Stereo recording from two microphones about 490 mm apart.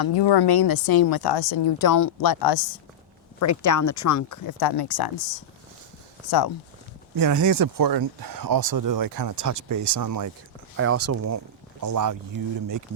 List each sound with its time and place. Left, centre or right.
0.0 s a woman's voice: left
1.9 s a woman's voice: left
3.4 s speech: left
7.2 s speech: right
10.8 s speech: right